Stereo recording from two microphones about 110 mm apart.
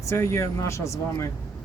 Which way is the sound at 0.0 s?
25° left (ahead or behind).